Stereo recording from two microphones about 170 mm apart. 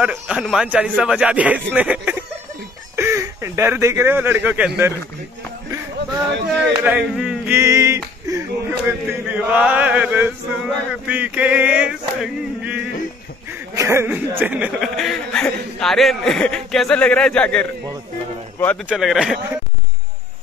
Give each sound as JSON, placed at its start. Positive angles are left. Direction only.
{"t": 0.0, "sound": "speech", "side_deg": 0}
{"t": 6.8, "sound": "speech", "side_deg": -5}
{"t": 7.5, "sound": "a sound", "side_deg": -20}
{"t": 13.7, "sound": "a man's voice", "side_deg": -15}
{"t": 18.9, "sound": "a man's voice", "side_deg": -5}